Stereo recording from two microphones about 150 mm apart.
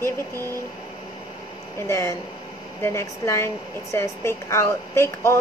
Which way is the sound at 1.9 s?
20° left (ahead or behind).